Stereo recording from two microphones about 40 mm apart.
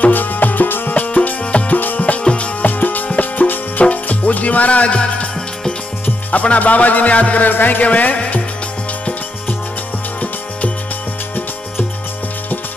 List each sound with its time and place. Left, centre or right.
0.0 s music: left
0.9 s music: left
2.6 s music: left
6.4 s a man's voice: left
7.4 s music: left
7.8 s a man's voice: left